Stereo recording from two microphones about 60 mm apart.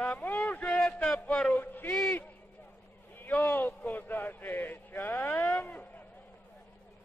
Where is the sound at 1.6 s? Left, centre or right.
Left.